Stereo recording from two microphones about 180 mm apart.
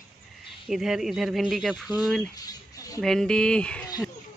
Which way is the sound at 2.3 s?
20° left (ahead or behind).